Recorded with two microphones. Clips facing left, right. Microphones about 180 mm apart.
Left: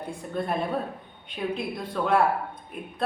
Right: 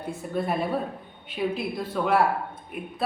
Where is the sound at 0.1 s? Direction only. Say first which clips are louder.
Right 2 dB; 5° right (ahead or behind).